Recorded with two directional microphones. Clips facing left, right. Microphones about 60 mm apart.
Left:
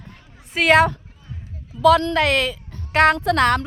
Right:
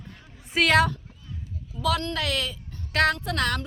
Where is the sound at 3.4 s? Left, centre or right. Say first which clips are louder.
Left 10 dB; left.